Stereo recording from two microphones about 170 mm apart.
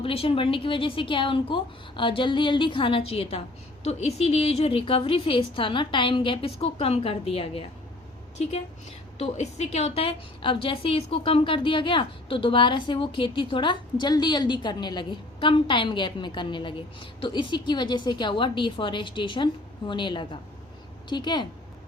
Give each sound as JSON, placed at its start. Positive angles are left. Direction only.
{"t": 0.0, "sound": "a woman's voice", "side_deg": 35}